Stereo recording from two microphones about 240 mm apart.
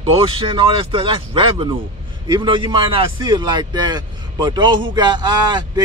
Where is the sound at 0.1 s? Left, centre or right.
Right.